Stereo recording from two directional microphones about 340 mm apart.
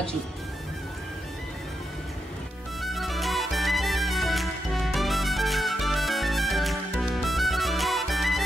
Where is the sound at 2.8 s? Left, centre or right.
Centre.